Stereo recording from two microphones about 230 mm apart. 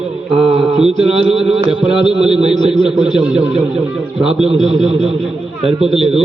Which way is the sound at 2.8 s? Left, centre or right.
Right.